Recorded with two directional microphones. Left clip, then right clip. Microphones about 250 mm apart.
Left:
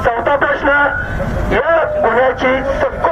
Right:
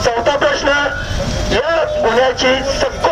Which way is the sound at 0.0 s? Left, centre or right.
Right.